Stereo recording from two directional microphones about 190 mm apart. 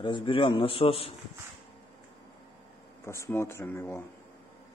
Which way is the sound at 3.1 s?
15° left (ahead or behind).